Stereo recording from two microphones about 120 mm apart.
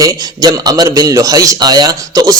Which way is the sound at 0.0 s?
30° right (ahead or behind).